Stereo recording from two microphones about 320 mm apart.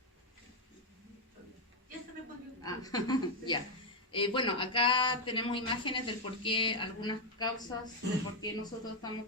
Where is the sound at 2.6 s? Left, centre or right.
Centre.